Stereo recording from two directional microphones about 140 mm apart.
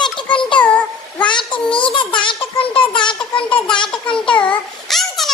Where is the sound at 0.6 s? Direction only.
10° left (ahead or behind).